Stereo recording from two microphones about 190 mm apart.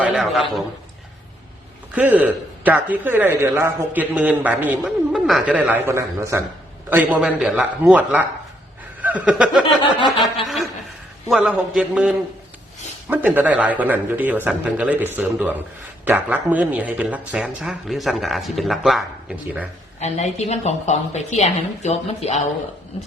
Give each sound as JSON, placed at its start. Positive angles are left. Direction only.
{"t": 0.0, "sound": "speech", "side_deg": 0}
{"t": 2.0, "sound": "a man's voice", "side_deg": -10}
{"t": 9.0, "sound": "chuckle", "side_deg": -10}
{"t": 10.0, "sound": "a sound", "side_deg": 25}
{"t": 10.4, "sound": "a man's voice", "side_deg": 0}
{"t": 20.0, "sound": "a woman's voice", "side_deg": 35}